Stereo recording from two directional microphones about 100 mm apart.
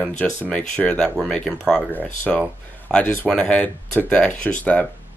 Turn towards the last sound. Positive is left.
turn(degrees=15)  # may be behind; listen again after turning